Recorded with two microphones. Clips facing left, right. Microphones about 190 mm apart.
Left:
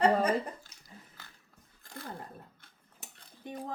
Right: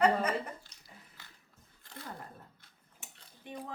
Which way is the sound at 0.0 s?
30° left (ahead or behind).